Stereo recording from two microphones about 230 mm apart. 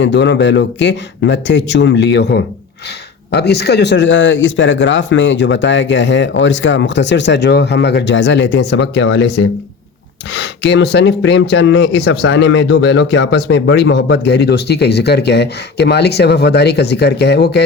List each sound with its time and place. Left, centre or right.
0.0 s speech: left